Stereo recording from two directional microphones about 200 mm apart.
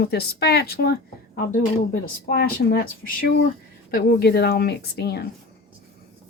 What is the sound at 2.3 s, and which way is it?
A woman's voice, 55° left (ahead or behind).